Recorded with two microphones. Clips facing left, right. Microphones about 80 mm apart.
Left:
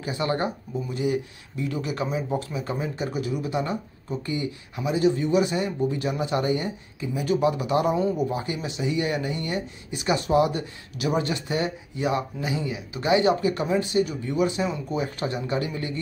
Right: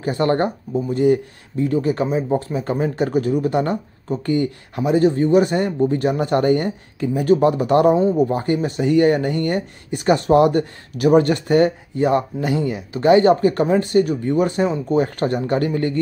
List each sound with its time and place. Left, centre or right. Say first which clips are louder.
0.0 s speech: right 8 dB; right
2.5 s speech: right 8 dB; right
7.9 s speech: right 8 dB; right
8.3 s speech: right 9 dB; right